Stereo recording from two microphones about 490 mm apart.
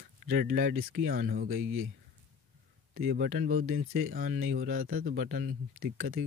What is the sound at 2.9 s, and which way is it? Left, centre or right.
Speech, centre.